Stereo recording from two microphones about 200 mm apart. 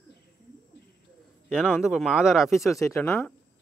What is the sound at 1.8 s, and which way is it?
Speech, centre (ahead or behind).